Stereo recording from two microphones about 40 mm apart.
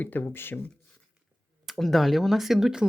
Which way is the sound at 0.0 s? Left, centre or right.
Left.